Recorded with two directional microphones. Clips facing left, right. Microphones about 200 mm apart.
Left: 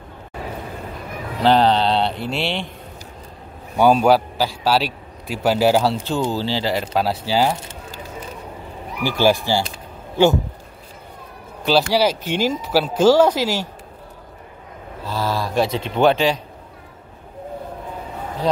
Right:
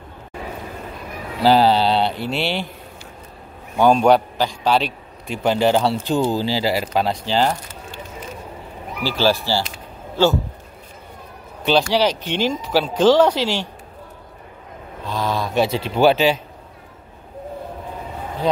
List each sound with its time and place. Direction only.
1.4 s speech: 5° right (ahead or behind)
3.7 s a man's voice: 10° left (ahead or behind)
6.0 s speech: 15° right (ahead or behind)
7.1 s speech: 5° left (ahead or behind)
9.0 s speech: 15° left (ahead or behind)
11.6 s speech: 5° left (ahead or behind)
15.0 s a man's voice: 5° left (ahead or behind)